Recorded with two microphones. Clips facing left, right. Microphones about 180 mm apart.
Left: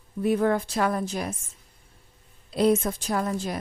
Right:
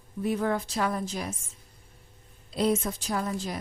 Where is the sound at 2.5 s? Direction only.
55° left (ahead or behind).